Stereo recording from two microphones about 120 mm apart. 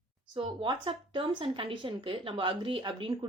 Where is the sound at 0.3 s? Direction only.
45° right (ahead or behind).